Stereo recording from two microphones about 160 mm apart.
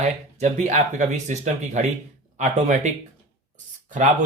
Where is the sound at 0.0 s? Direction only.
45° right (ahead or behind).